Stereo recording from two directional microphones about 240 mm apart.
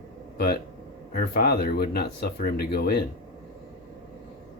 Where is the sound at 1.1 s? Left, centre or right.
Left.